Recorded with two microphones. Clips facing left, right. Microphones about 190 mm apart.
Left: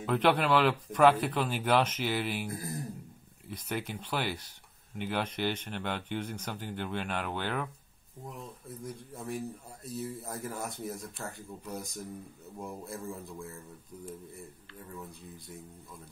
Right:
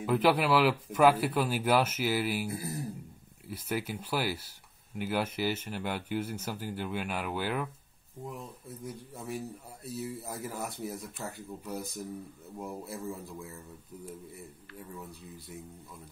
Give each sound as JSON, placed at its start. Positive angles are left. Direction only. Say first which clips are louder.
{"t": 0.0, "sound": "speech", "louder": "right 1 dB", "side_deg": -5}